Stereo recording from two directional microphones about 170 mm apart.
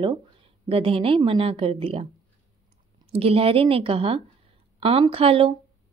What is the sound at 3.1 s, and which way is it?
A woman's voice, 35° right (ahead or behind).